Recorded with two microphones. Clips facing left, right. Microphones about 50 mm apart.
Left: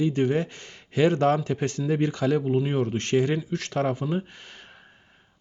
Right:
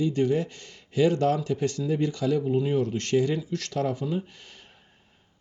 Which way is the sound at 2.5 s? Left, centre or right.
Left.